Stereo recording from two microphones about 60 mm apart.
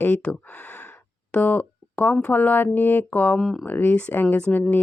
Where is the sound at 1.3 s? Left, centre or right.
Left.